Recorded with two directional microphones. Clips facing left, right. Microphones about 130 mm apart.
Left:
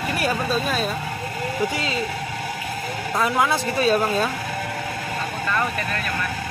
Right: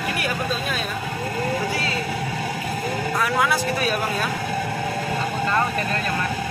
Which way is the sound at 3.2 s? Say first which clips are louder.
Left 2 dB; 25° left (ahead or behind).